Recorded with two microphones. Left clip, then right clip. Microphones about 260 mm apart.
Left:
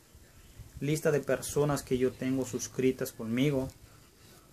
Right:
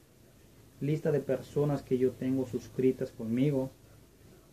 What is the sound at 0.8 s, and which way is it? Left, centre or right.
Speech, centre.